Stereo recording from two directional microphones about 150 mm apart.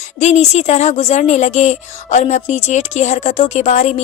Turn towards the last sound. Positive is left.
turn(degrees=50)  # may be behind; listen again after turning